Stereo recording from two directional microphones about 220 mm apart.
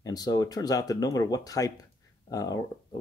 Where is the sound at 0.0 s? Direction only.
15° left (ahead or behind).